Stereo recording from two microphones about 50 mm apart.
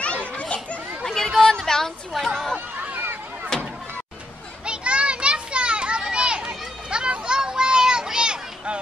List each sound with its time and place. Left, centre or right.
0.0 s children playing: left
1.0 s a sound: centre
2.1 s chatter: centre
4.6 s children playing: right